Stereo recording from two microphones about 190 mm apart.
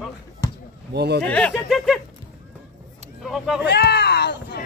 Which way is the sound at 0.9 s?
60° right (ahead or behind).